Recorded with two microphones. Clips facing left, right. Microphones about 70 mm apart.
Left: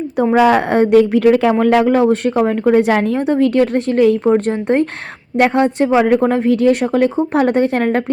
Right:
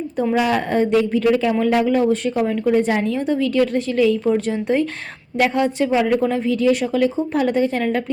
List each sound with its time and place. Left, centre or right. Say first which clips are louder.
0.3 s speech: left 7 dB; left
2.4 s a woman's voice: left 6 dB; left